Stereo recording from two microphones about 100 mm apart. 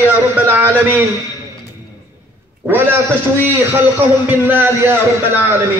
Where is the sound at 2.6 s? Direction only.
20° right (ahead or behind).